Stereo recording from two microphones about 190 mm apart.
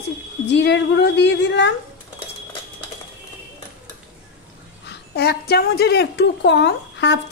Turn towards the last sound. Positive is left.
turn(degrees=70)  # may be behind; listen again after turning